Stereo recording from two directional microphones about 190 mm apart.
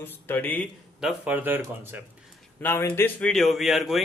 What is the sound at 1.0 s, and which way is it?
Speech, 10° right (ahead or behind).